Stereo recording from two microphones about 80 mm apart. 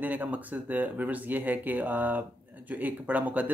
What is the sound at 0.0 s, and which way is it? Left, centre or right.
Speech, right.